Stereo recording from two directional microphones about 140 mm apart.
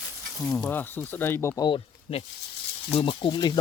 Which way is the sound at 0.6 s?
15° left (ahead or behind).